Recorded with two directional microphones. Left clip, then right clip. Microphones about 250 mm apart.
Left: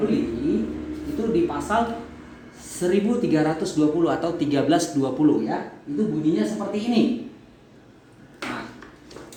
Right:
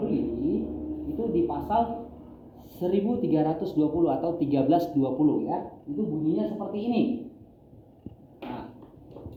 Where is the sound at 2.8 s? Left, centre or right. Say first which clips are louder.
Left 4 dB; left.